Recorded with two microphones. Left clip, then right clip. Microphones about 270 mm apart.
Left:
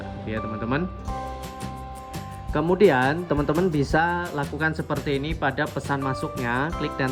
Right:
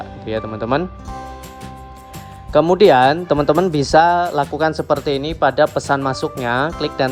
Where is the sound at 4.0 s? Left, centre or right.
Centre.